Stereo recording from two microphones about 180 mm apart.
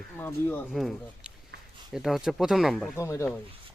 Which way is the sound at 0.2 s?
10° left (ahead or behind).